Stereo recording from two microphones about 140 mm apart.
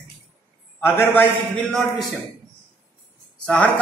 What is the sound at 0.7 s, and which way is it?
Speech, 15° left (ahead or behind).